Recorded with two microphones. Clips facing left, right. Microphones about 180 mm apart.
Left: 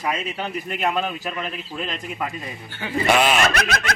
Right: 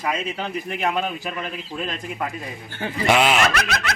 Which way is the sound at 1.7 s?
5° left (ahead or behind).